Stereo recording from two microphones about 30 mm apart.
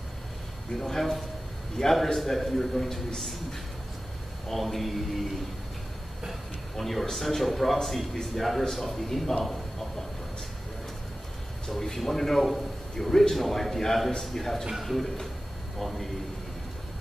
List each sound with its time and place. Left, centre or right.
0.7 s a man's voice: centre
4.5 s a man's voice: centre
6.8 s a man's voice: centre
12.0 s a man's voice: centre
12.4 s a man's voice: centre
12.9 s a man's voice: centre